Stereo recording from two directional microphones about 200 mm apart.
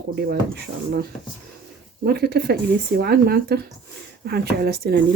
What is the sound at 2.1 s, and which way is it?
Speech, 50° right (ahead or behind).